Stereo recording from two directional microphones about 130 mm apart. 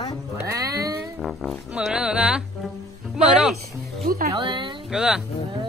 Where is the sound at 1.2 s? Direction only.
Centre (ahead or behind).